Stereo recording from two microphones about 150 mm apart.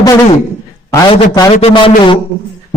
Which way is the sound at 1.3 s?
30° left (ahead or behind).